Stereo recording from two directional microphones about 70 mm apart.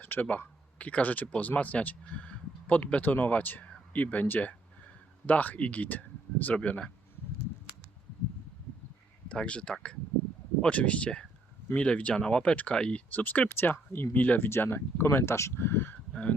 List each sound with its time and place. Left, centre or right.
0.0 s speech: left
9.3 s speech: centre; by 16.0 s left